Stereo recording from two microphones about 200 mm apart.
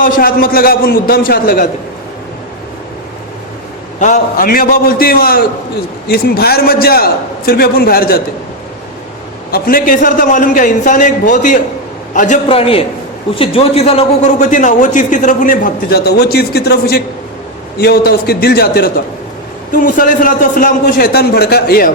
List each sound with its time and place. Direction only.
0.0 s a man's voice: 45° left (ahead or behind)
4.0 s a man's voice: 40° left (ahead or behind)
9.5 s a man's voice: 45° left (ahead or behind)
12.5 s a man's voice: 30° left (ahead or behind); by 21.9 s 50° left (ahead or behind)